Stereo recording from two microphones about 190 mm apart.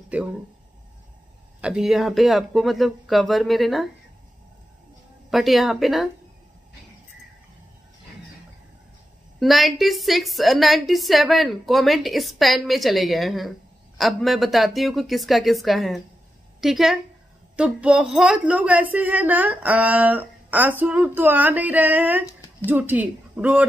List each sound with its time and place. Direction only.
0.1 s speech: 5° right (ahead or behind)
1.6 s a woman's voice: 5° right (ahead or behind)
5.3 s a woman's voice: centre (ahead or behind)
9.4 s a woman's voice: centre (ahead or behind)
22.2 s a sound: 15° left (ahead or behind)
22.7 s speech: 10° right (ahead or behind)